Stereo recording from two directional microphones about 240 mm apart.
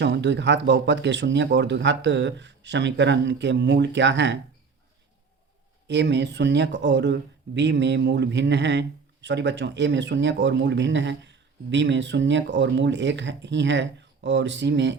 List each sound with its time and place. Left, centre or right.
0.0 s speech: right
5.9 s speech: right